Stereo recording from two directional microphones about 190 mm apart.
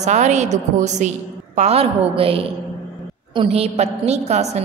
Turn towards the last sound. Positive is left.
turn(degrees=-35)  # may be behind; listen again after turning